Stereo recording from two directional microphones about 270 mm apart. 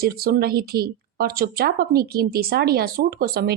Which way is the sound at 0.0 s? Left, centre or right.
Right.